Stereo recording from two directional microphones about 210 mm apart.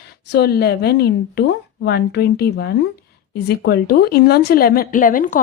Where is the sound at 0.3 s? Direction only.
50° left (ahead or behind).